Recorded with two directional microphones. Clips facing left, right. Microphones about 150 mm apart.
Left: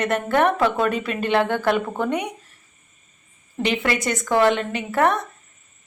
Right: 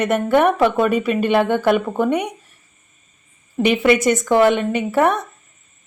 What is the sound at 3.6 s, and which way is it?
A woman's voice, 15° right (ahead or behind).